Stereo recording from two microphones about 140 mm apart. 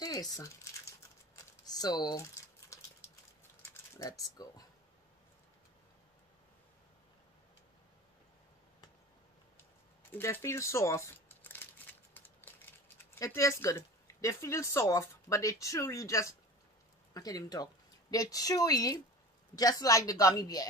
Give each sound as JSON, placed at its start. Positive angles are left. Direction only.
{"t": 0.0, "sound": "a sound", "side_deg": 25}
{"t": 1.3, "sound": "typing", "side_deg": 25}
{"t": 4.0, "sound": "a woman's voice", "side_deg": 25}
{"t": 10.1, "sound": "crumpling", "side_deg": 15}
{"t": 17.1, "sound": "a woman's voice", "side_deg": 25}